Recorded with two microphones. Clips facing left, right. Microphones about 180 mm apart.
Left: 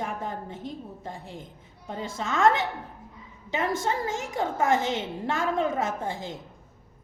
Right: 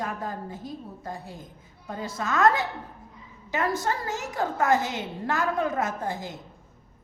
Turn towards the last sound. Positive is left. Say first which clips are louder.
# even
turn(degrees=25)  # may be behind; listen again after turning